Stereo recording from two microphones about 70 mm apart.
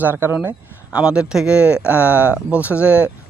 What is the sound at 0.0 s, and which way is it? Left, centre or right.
Speech, right.